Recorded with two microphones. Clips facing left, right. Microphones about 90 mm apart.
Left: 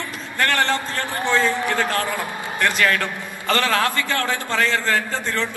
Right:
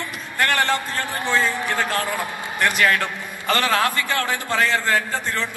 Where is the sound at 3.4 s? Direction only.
20° right (ahead or behind).